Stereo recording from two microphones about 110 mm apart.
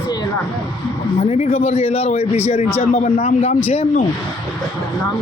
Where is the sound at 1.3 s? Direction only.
70° left (ahead or behind).